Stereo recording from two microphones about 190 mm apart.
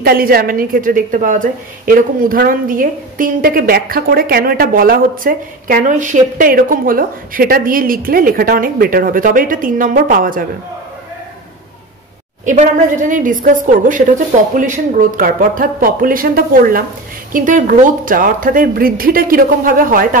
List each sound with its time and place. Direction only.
0.0 s a woman's voice: 50° right (ahead or behind)
12.4 s a woman's voice: 40° right (ahead or behind)